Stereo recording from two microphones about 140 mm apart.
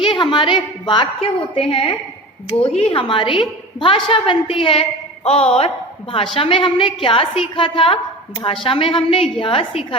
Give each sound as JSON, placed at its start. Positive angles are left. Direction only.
{"t": 0.0, "sound": "a woman's voice", "side_deg": 35}